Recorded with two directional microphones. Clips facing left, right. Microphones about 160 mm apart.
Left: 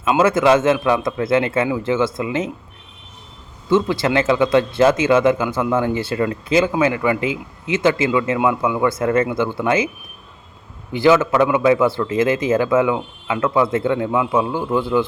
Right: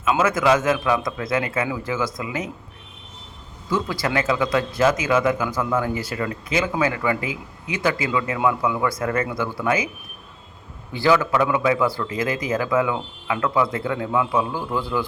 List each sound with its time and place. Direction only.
0.0 s speech: 30° left (ahead or behind)
3.7 s speech: 25° left (ahead or behind)
10.9 s speech: 20° left (ahead or behind)